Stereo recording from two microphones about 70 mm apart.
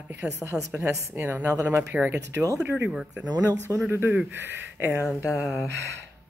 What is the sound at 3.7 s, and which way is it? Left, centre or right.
Speech, right.